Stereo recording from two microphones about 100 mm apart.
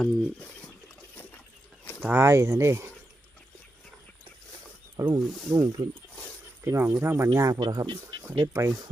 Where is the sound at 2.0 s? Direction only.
20° right (ahead or behind).